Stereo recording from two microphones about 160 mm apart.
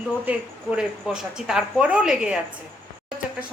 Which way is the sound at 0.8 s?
5° right (ahead or behind).